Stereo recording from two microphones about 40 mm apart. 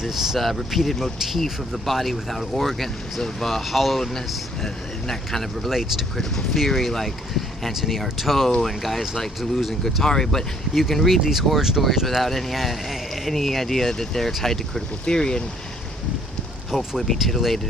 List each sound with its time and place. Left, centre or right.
0.0 s speech: centre
9.8 s speech: centre
11.2 s speech: centre
12.1 s speech: centre
15.0 s speech: centre
16.7 s speech: centre
17.2 s speech: centre